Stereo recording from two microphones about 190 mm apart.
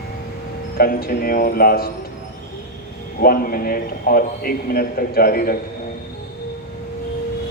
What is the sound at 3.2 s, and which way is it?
A man's voice, 50° left (ahead or behind).